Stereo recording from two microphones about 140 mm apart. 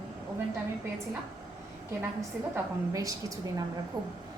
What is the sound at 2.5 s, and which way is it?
Speech, 25° right (ahead or behind).